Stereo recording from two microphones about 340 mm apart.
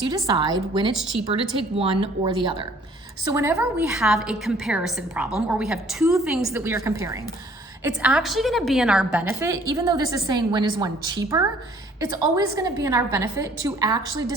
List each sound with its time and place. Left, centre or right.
0.1 s a woman's voice: centre